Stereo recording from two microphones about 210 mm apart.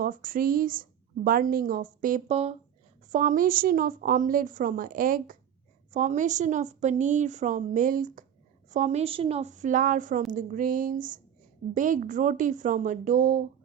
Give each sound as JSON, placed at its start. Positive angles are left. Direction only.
{"t": 0.0, "sound": "a woman's voice", "side_deg": -40}
{"t": 2.2, "sound": "a woman's voice", "side_deg": -30}